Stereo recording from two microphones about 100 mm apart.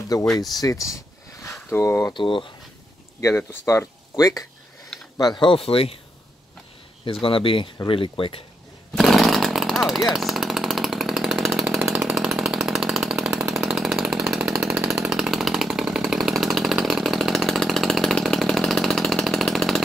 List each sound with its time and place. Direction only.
0.2 s speech: 5° left (ahead or behind)
0.6 s speech: 35° left (ahead or behind)
2.1 s speech: 55° left (ahead or behind)
3.2 s speech: 30° left (ahead or behind)
5.2 s speech: 50° left (ahead or behind); by 5.9 s 70° left (ahead or behind)
7.1 s speech: 60° left (ahead or behind)
8.9 s chainsaw: centre (ahead or behind)